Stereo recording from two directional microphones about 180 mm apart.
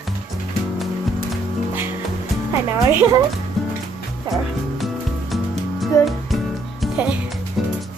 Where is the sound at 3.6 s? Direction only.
Centre (ahead or behind).